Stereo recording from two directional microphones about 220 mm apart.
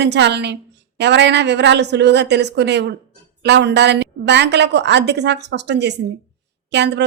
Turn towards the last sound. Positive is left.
turn(degrees=-50)  # may be behind; listen again after turning